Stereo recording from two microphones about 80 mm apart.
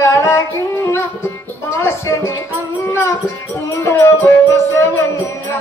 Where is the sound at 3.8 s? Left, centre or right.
Left.